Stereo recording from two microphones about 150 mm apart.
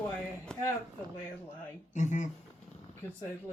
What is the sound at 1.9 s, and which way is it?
Speech, 55° left (ahead or behind).